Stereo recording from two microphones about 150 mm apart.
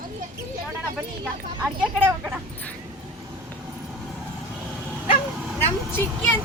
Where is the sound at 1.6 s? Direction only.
10° right (ahead or behind).